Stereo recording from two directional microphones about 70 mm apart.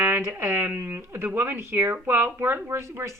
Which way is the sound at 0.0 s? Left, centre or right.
Right.